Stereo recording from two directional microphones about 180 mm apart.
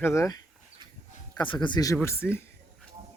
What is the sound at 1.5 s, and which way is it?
Speech, 25° left (ahead or behind).